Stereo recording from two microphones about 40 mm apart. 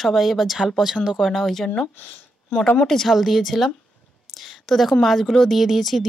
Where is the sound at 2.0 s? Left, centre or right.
Left.